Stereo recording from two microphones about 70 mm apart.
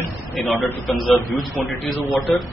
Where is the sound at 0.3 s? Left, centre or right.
Centre.